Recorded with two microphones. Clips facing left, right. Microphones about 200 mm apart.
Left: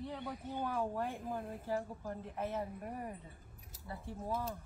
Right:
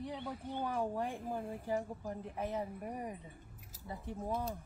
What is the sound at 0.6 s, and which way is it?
A woman's voice, 15° right (ahead or behind).